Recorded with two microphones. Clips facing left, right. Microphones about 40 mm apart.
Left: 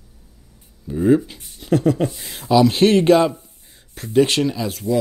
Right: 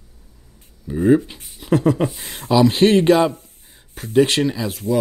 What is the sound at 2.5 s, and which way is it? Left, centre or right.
Speech, centre.